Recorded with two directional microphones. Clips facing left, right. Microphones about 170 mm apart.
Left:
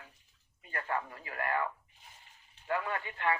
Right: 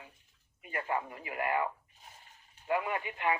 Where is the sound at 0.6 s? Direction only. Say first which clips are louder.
Right 2 dB; 15° right (ahead or behind).